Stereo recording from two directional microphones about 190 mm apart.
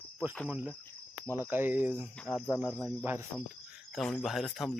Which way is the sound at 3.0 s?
10° right (ahead or behind).